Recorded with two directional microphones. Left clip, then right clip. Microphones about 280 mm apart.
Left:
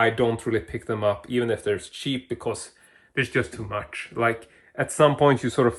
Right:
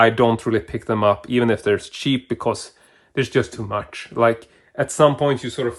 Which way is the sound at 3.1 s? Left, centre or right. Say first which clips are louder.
Right 4 dB; centre.